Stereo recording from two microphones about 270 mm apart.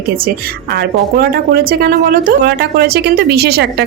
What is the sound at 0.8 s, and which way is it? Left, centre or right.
Speech, right.